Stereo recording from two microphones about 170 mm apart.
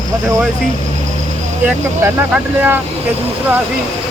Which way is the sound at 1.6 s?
5° right (ahead or behind).